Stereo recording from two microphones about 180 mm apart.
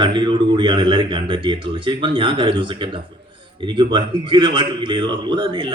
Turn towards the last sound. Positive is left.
turn(degrees=-25)  # may be behind; listen again after turning